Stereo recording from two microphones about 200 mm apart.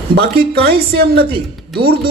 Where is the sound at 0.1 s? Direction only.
55° right (ahead or behind).